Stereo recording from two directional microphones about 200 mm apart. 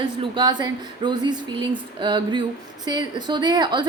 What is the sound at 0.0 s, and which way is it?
A woman's voice, 25° right (ahead or behind).